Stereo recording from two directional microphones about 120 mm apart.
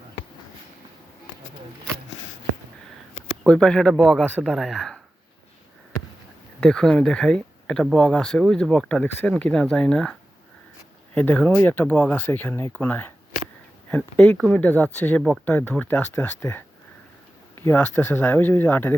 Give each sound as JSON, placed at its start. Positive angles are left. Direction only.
{"t": 3.4, "sound": "speech", "side_deg": 10}
{"t": 6.6, "sound": "speech", "side_deg": 5}